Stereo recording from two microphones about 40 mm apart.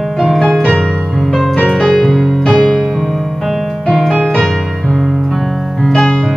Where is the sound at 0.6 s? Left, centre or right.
Left.